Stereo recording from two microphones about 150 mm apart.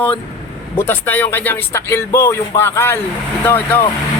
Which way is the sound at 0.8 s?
15° left (ahead or behind).